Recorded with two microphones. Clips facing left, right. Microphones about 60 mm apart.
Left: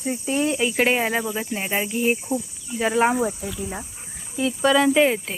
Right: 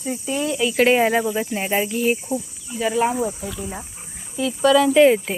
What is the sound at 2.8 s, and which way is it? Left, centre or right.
Speech, left.